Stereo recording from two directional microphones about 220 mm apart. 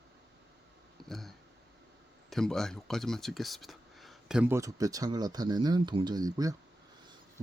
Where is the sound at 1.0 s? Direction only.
Centre (ahead or behind).